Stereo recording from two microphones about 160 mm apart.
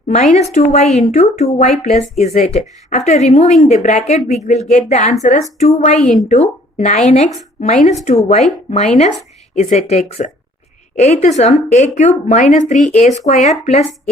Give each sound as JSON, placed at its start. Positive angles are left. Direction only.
{"t": 0.1, "sound": "speech", "side_deg": 50}